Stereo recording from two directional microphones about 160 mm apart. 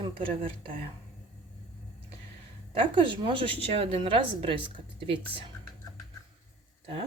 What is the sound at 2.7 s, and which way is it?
A woman's voice, 30° right (ahead or behind).